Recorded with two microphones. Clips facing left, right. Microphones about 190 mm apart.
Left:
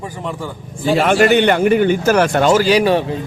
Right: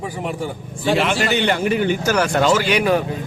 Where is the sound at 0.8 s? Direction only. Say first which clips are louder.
Left 6 dB; 50° left (ahead or behind).